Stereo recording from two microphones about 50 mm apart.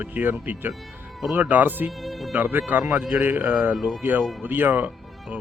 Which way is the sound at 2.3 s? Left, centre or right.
Right.